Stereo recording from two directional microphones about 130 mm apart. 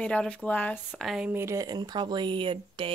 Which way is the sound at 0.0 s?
5° left (ahead or behind).